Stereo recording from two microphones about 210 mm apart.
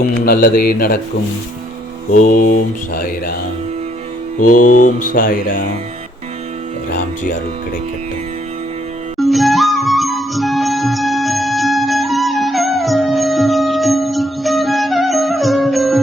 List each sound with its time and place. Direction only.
0.0 s mantra: 45° left (ahead or behind)
2.1 s mantra: 40° left (ahead or behind)
4.5 s mantra: 90° left
5.1 s speech: 40° left (ahead or behind)
9.1 s music: centre (ahead or behind)